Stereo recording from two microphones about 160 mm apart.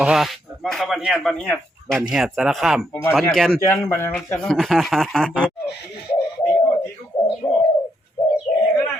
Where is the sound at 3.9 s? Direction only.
15° left (ahead or behind).